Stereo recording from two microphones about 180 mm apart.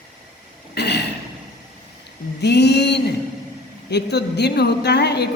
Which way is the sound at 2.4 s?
70° left (ahead or behind).